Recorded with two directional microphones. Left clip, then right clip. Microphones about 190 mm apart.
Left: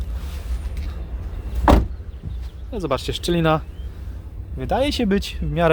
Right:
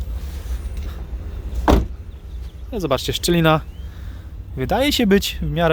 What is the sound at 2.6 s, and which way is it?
Speech, 15° right (ahead or behind).